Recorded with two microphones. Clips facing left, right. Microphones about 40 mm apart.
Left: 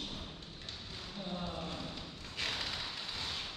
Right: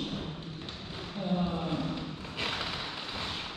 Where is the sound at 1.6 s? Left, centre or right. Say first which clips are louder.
Right 9 dB; right.